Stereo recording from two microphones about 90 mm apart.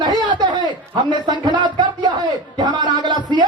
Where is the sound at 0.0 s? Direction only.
50° right (ahead or behind).